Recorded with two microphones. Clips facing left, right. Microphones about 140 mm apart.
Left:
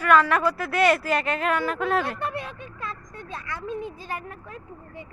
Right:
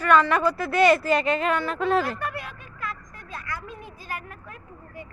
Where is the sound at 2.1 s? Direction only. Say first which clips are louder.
Left 2 dB; 25° left (ahead or behind).